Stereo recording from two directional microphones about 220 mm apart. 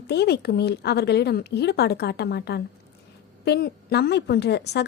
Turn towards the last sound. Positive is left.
turn(degrees=50)  # may be behind; listen again after turning